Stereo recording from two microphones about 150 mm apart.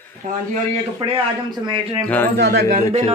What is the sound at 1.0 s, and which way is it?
Speech, 35° right (ahead or behind).